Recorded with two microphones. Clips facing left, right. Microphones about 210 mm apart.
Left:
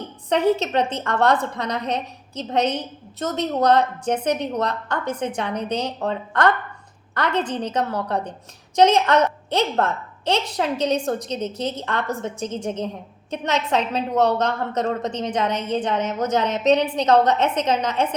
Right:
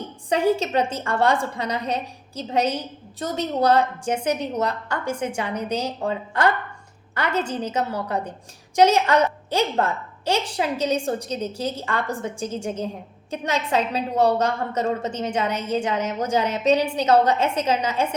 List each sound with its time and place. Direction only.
0.3 s a woman's voice: 10° right (ahead or behind)